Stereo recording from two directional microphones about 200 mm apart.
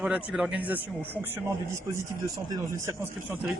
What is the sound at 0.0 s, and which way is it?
Speech, 5° right (ahead or behind).